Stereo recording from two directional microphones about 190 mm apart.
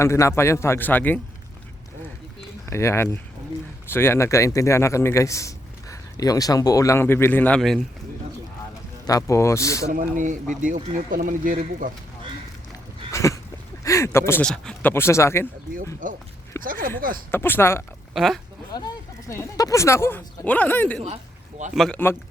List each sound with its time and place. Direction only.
0.0 s speech: 15° left (ahead or behind)
2.6 s speech: 15° left (ahead or behind)
9.0 s speech: 15° left (ahead or behind)
9.9 s speech: 45° right (ahead or behind)
13.1 s a sound: 15° left (ahead or behind)
13.8 s speech: 15° left (ahead or behind)
16.0 s speech: 45° right (ahead or behind)
16.5 s speech: 15° left (ahead or behind)
18.1 s speech: centre (ahead or behind)
18.7 s speech: 20° left (ahead or behind); by 22.1 s 5° left (ahead or behind)